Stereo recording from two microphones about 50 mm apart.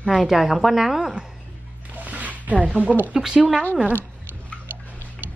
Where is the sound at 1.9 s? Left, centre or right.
Right.